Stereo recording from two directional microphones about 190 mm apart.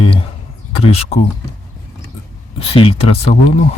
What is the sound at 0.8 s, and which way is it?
Speech, 30° left (ahead or behind).